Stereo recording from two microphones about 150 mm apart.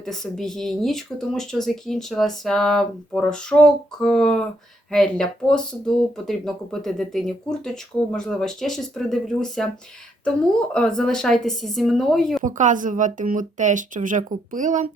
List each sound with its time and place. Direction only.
0.0 s speech: 5° left (ahead or behind)
12.4 s a woman's voice: 60° right (ahead or behind)